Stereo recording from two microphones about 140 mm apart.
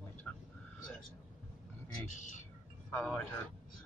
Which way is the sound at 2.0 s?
60° left (ahead or behind).